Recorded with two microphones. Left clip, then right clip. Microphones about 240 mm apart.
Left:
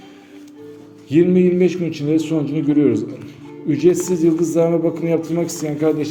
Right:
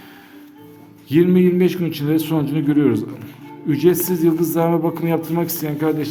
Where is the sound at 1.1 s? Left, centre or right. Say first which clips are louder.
Left 1 dB; centre.